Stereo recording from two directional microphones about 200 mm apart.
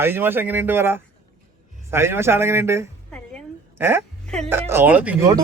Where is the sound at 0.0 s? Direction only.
10° right (ahead or behind).